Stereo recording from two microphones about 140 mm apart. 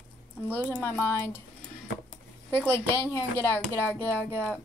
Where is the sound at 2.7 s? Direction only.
15° left (ahead or behind).